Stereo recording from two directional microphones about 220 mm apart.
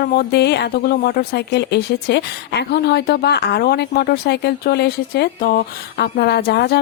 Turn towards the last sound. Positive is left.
turn(degrees=45)  # may be behind; listen again after turning